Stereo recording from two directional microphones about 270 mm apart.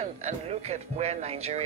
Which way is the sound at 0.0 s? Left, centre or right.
Right.